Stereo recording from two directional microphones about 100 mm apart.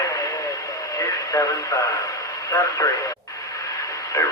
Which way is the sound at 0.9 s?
35° left (ahead or behind).